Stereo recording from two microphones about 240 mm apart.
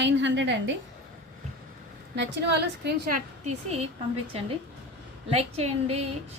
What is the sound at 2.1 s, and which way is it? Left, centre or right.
A woman's voice, right.